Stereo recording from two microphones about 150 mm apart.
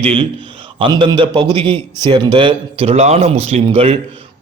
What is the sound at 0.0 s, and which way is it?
A man's voice, 40° right (ahead or behind).